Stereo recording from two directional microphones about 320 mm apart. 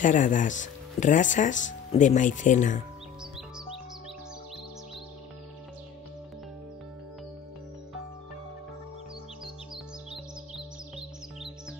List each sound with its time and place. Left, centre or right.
0.0 s speech: left